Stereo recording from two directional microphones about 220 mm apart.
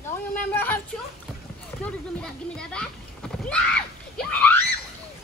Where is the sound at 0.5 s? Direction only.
10° left (ahead or behind).